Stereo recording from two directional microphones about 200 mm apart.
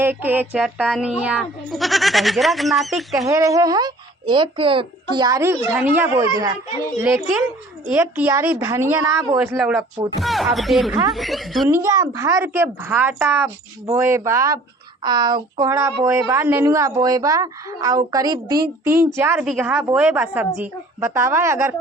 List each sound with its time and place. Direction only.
0.0 s speech: 10° right (ahead or behind)
3.2 s a woman's voice: 15° right (ahead or behind)
7.9 s a woman's voice: 10° right (ahead or behind)
11.7 s a woman's voice: 15° right (ahead or behind)